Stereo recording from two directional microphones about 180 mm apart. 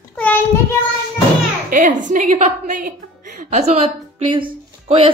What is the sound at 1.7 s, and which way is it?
A woman's voice, 45° right (ahead or behind).